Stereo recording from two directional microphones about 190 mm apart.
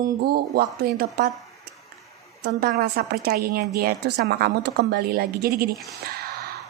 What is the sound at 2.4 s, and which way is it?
A woman's voice, 55° right (ahead or behind).